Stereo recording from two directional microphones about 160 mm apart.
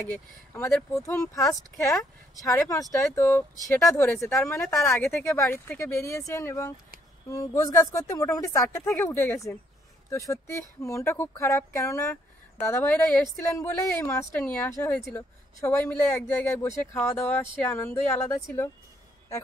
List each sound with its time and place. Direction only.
0.1 s speech: 10° left (ahead or behind)
8.6 s speech: 10° left (ahead or behind)